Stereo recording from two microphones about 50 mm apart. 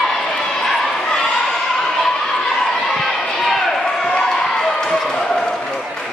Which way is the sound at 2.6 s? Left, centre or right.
Centre.